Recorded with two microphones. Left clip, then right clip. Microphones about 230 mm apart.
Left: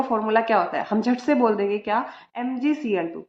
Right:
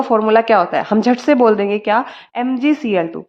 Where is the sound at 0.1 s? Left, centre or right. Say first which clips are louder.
Right 10 dB; right.